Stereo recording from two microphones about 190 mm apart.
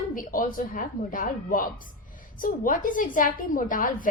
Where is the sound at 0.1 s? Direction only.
45° left (ahead or behind).